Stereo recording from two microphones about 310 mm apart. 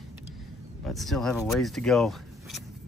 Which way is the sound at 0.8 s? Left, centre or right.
Centre.